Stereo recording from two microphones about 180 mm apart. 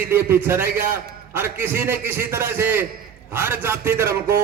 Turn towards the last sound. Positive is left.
turn(degrees=-15)  # may be behind; listen again after turning